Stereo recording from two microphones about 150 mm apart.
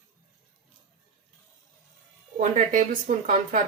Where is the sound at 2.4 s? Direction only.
60° right (ahead or behind).